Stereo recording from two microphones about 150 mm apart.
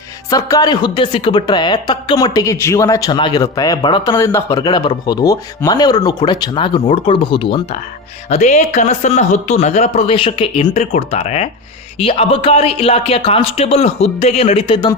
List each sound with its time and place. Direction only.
0.3 s speech: 25° left (ahead or behind)
8.3 s speech: 50° left (ahead or behind); by 14.9 s 30° left (ahead or behind)